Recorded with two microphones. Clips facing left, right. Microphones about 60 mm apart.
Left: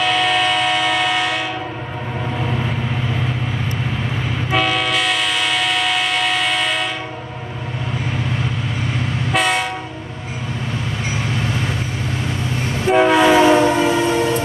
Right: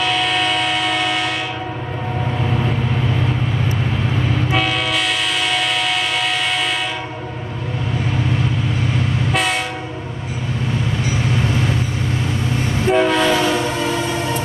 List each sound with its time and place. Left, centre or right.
0.0 s a sound: centre
4.5 s train: centre
9.3 s train: centre
12.8 s train: centre
13.8 s train: centre